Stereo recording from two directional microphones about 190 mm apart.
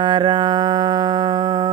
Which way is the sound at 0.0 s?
25° right (ahead or behind).